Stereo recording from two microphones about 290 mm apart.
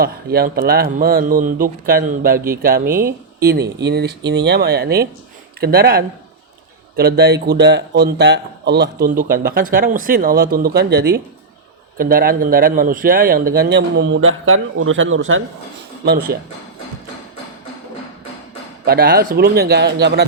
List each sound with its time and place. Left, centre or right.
0.0 s speech: right
2.8 s speech: centre
3.4 s speech: right
16.0 s speech: right
18.9 s speech: right